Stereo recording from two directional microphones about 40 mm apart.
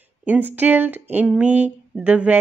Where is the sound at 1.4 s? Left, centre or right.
Right.